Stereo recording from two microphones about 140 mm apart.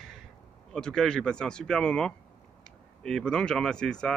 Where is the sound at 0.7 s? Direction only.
5° left (ahead or behind).